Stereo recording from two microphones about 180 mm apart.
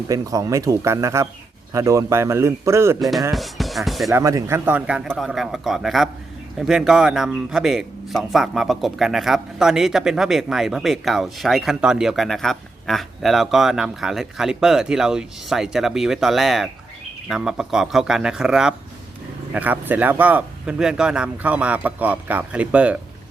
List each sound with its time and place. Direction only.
0.1 s speech: 20° right (ahead or behind)
3.3 s speech: centre (ahead or behind)
4.1 s a man's voice: 20° right (ahead or behind)